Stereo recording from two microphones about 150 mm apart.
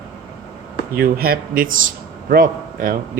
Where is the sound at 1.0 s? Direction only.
90° right; by 3.0 s 70° right (ahead or behind).